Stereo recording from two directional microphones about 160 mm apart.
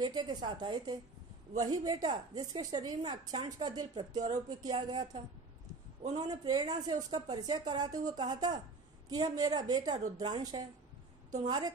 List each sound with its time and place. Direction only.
0.0 s a woman's voice: 25° right (ahead or behind)